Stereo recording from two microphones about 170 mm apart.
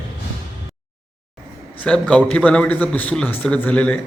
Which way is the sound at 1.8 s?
5° left (ahead or behind).